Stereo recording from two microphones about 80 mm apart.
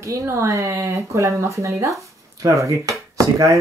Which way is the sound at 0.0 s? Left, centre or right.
Right.